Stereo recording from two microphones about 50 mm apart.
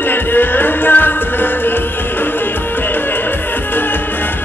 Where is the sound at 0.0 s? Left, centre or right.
Left.